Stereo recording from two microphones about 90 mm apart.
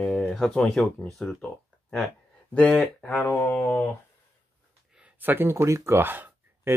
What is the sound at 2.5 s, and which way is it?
Speech, 10° left (ahead or behind).